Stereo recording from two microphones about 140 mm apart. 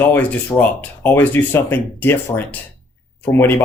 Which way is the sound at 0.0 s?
15° left (ahead or behind).